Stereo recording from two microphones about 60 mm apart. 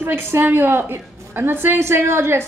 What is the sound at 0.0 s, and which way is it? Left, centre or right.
A woman's voice, right.